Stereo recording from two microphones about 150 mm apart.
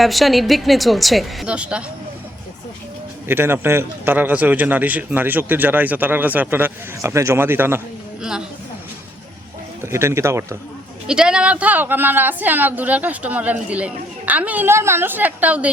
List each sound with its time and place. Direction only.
0.0 s a woman's voice: centre (ahead or behind)
3.2 s a woman's voice: 15° right (ahead or behind)
9.8 s a woman's voice: 20° right (ahead or behind)
11.0 s a woman's voice: 5° right (ahead or behind)